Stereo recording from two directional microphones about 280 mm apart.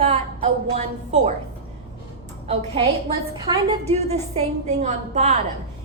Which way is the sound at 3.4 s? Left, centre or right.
Centre.